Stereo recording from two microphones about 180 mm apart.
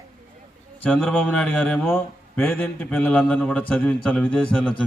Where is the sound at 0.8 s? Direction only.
5° left (ahead or behind).